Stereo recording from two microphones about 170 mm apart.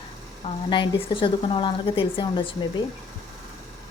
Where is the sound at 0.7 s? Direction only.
30° left (ahead or behind).